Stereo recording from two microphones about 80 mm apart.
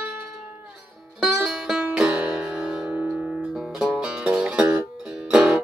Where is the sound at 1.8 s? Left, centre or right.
Centre.